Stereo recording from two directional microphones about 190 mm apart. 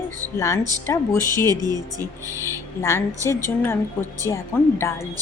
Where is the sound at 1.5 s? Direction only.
20° right (ahead or behind).